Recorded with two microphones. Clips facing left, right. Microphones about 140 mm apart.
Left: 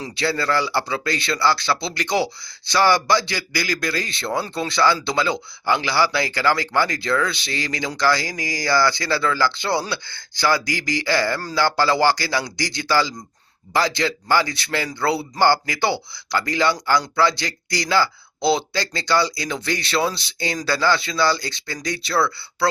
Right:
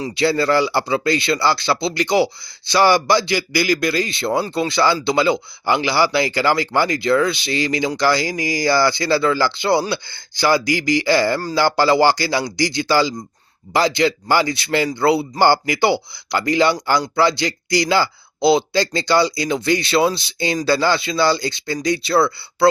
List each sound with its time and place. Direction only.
0.0 s speech: 15° right (ahead or behind)